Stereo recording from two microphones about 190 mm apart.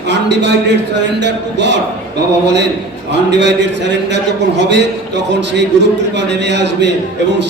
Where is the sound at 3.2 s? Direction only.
65° right (ahead or behind).